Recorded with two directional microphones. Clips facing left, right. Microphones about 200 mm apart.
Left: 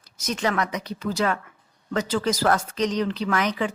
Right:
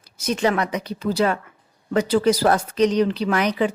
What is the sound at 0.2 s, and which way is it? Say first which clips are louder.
A woman's voice: right 4 dB; 30° right (ahead or behind).